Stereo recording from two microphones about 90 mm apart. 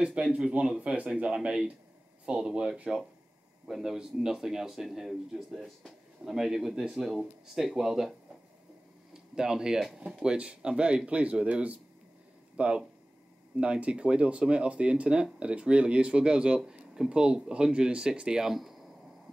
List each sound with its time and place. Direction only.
0.0 s speech: 10° right (ahead or behind)
9.1 s speech: 5° right (ahead or behind)